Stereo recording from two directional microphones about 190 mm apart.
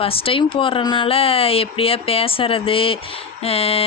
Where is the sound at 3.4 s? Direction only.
30° left (ahead or behind).